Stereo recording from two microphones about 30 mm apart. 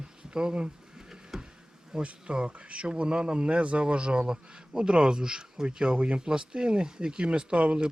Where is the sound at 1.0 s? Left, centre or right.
Centre.